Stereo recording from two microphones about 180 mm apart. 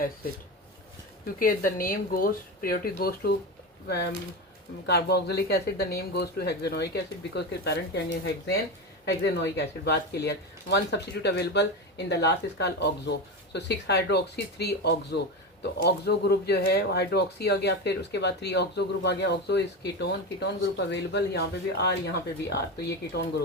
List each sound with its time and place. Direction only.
1.4 s speech: 50° left (ahead or behind)